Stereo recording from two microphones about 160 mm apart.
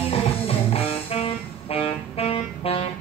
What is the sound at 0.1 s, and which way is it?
Music, 35° left (ahead or behind).